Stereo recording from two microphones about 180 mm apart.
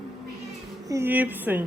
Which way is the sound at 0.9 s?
10° right (ahead or behind).